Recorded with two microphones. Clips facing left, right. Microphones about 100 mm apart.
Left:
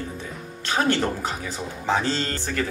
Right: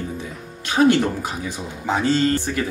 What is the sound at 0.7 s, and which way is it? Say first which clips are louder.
Speech: right 6 dB; 15° right (ahead or behind).